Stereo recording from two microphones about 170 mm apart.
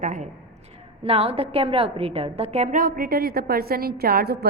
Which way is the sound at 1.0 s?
35° right (ahead or behind).